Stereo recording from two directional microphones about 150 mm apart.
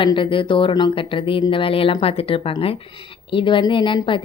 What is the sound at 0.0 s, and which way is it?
Speech, 35° left (ahead or behind).